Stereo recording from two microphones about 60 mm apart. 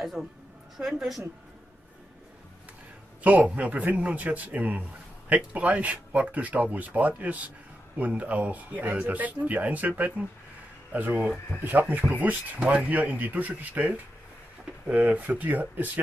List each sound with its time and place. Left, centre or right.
0.0 s a woman's voice: centre
3.2 s a man's voice: right